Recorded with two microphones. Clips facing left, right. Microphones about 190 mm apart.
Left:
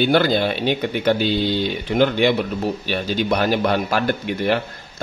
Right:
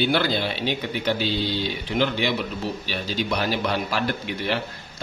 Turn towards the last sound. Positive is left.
turn(degrees=50)  # may be behind; listen again after turning